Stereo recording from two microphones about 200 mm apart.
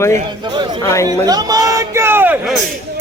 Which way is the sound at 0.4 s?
20° right (ahead or behind).